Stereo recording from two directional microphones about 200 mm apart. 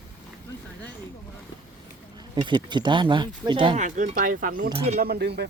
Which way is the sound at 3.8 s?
40° right (ahead or behind).